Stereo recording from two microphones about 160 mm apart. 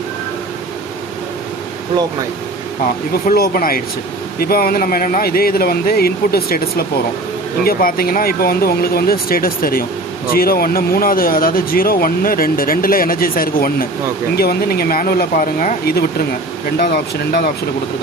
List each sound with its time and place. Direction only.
3.2 s speech: 65° left (ahead or behind)
16.7 s speech: 90° left